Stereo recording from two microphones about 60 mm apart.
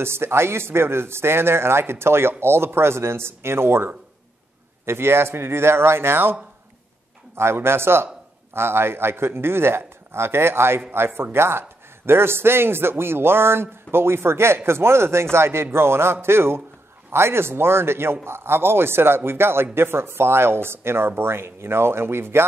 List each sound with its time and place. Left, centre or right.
0.0 s speech: right
7.3 s speech: right